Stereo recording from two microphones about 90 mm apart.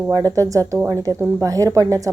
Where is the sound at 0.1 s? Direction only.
40° right (ahead or behind).